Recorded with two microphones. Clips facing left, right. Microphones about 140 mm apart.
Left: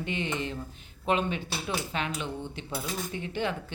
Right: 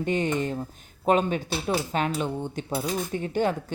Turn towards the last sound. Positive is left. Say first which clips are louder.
# right 6 dB
turn(degrees=-45)  # may be behind; listen again after turning